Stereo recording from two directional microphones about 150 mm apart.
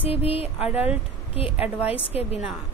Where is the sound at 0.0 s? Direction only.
40° left (ahead or behind).